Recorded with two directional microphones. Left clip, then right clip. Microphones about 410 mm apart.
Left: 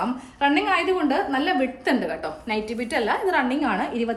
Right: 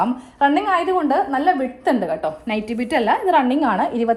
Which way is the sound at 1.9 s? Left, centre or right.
Centre.